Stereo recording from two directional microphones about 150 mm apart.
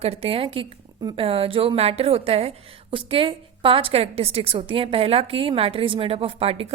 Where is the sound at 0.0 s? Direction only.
40° right (ahead or behind).